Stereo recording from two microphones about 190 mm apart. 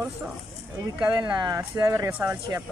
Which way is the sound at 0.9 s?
5° right (ahead or behind).